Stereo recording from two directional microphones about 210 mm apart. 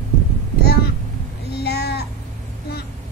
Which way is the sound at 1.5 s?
50° left (ahead or behind).